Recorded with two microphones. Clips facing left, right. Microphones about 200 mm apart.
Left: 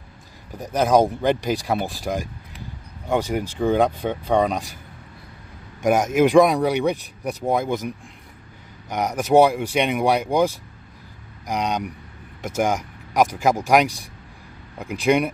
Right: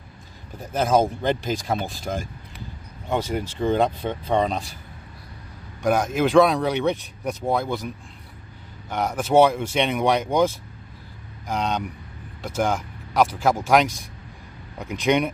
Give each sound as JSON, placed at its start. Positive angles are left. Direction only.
{"t": 0.6, "sound": "speech", "side_deg": 15}
{"t": 6.1, "sound": "speech", "side_deg": 15}
{"t": 8.9, "sound": "speech", "side_deg": 15}